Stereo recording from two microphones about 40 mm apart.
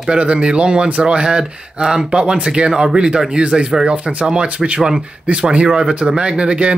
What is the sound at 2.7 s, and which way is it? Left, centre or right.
Speech, centre.